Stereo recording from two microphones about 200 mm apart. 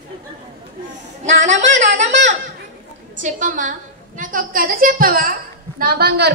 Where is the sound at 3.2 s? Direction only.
40° right (ahead or behind).